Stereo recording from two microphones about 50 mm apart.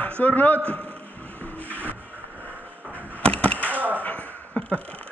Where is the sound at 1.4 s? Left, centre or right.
Left.